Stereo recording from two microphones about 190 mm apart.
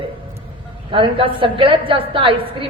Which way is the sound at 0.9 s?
25° right (ahead or behind).